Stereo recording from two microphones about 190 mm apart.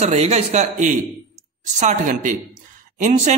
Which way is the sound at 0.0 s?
35° right (ahead or behind).